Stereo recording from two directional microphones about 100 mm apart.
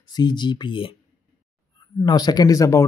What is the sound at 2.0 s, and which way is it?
Speech, 40° left (ahead or behind).